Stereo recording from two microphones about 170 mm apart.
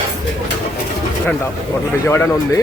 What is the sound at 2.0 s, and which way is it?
Speech, 15° left (ahead or behind).